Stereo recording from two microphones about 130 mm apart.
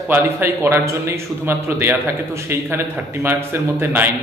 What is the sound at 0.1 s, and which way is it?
A man's voice, 15° right (ahead or behind).